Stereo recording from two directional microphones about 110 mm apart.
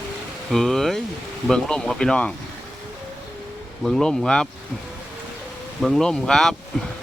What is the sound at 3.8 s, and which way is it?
Speech, 5° left (ahead or behind).